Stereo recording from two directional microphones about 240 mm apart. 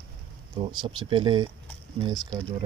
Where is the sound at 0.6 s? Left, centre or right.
Centre.